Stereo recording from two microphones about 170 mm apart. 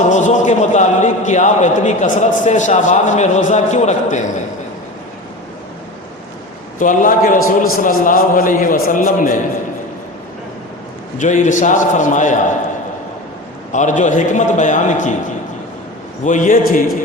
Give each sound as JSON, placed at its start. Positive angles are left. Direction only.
{"t": 0.1, "sound": "a man's voice", "side_deg": 45}
{"t": 6.7, "sound": "a man's voice", "side_deg": 50}
{"t": 11.2, "sound": "a man's voice", "side_deg": 45}
{"t": 13.7, "sound": "a man's voice", "side_deg": 45}
{"t": 16.2, "sound": "a man's voice", "side_deg": 50}